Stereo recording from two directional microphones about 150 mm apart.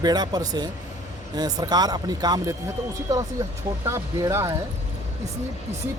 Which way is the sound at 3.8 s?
20° right (ahead or behind).